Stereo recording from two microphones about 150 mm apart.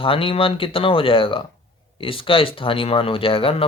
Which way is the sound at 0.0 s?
35° left (ahead or behind).